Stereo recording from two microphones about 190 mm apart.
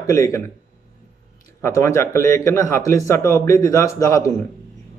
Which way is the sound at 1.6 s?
15° left (ahead or behind).